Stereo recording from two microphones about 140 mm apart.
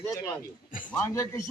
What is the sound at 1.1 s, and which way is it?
Speech, 20° left (ahead or behind).